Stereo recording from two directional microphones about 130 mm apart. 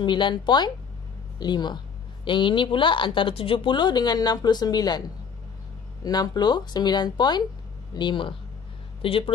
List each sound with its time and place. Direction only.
0.0 s a woman's voice: 35° left (ahead or behind)
6.0 s a woman's voice: 30° left (ahead or behind)